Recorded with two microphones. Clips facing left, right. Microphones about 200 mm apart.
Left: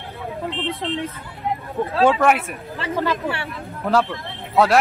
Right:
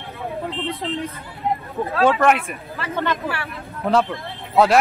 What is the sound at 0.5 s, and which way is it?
Speech, centre (ahead or behind).